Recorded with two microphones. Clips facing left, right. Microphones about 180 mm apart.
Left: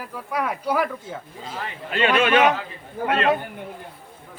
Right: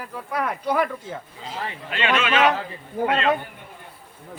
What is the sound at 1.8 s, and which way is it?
Speech, 40° left (ahead or behind).